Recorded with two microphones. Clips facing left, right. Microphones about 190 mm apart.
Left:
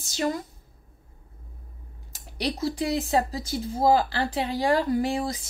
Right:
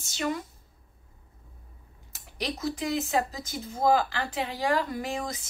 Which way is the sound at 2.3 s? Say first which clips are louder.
Left 4 dB; 35° left (ahead or behind).